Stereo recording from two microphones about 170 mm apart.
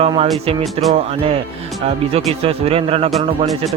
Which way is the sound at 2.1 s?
35° right (ahead or behind).